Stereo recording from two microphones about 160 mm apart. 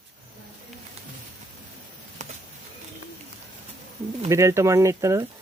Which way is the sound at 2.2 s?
50° right (ahead or behind).